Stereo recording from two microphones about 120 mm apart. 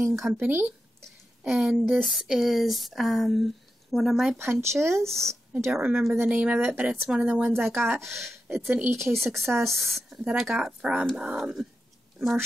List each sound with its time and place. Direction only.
0.3 s a woman's voice: 15° right (ahead or behind)
1.4 s speech: 5° right (ahead or behind)
4.4 s speech: 20° right (ahead or behind)
5.0 s speech: 5° left (ahead or behind)
5.7 s a woman's voice: 15° right (ahead or behind)
7.5 s speech: centre (ahead or behind)
7.9 s a woman's voice: 20° right (ahead or behind)
9.0 s a woman's voice: centre (ahead or behind)